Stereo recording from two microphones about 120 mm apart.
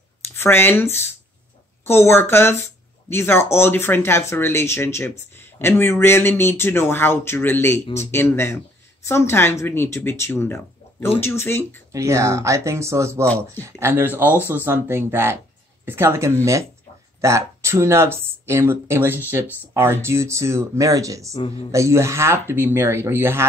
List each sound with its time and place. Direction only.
0.4 s speech: 20° left (ahead or behind)
11.9 s speech: 25° right (ahead or behind)